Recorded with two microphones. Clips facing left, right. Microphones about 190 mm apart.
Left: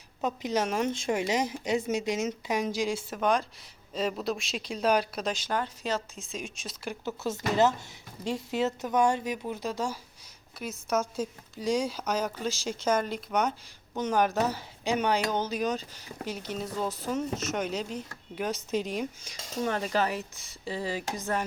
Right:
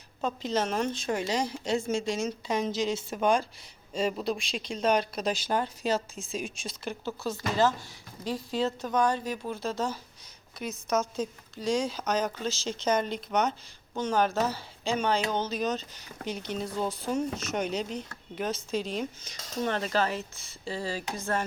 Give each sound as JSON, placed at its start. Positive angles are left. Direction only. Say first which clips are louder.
{"t": 0.2, "sound": "a woman's voice", "louder": "even", "side_deg": 15}
{"t": 5.6, "sound": "a woman's voice", "louder": "right 3 dB", "side_deg": -10}
{"t": 7.2, "sound": "a woman's voice", "louder": "left 2 dB", "side_deg": 20}